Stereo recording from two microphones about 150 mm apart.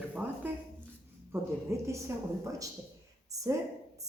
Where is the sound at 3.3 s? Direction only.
20° right (ahead or behind).